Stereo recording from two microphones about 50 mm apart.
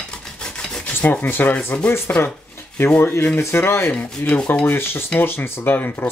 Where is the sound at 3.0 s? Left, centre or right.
Left.